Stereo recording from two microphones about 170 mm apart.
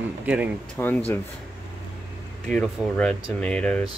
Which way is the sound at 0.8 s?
10° left (ahead or behind).